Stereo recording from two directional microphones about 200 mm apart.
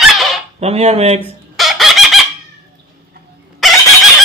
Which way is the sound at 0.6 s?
30° right (ahead or behind).